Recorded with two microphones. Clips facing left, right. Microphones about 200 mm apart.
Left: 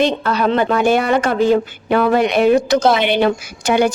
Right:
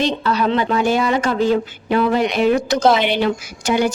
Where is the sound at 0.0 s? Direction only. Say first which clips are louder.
Left 2 dB; 50° left (ahead or behind).